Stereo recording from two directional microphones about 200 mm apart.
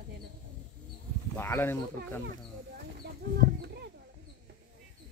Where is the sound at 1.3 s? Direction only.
10° left (ahead or behind).